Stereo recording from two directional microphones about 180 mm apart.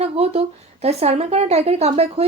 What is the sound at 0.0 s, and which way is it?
A woman's voice, 35° right (ahead or behind).